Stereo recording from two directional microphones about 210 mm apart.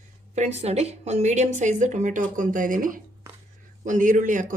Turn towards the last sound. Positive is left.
turn(degrees=-40)  # may be behind; listen again after turning